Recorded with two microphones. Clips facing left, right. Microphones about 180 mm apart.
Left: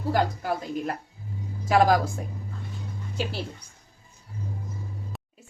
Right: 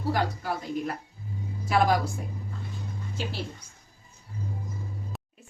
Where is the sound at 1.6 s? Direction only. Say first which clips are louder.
Left 3 dB; 45° left (ahead or behind).